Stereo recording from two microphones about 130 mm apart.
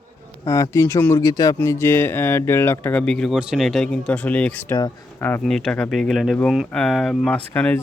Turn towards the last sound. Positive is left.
turn(degrees=10)  # may be behind; listen again after turning